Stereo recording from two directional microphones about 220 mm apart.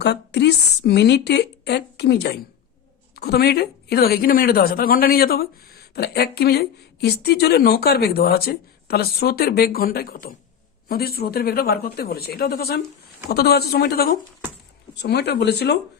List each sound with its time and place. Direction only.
0.0 s a woman's voice: 50° left (ahead or behind)